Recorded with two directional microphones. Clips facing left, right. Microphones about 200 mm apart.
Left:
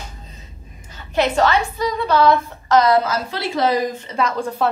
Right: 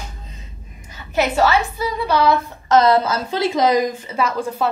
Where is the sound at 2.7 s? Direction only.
25° right (ahead or behind).